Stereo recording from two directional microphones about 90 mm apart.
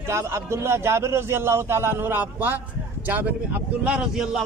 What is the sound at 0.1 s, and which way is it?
A man's voice, 30° right (ahead or behind).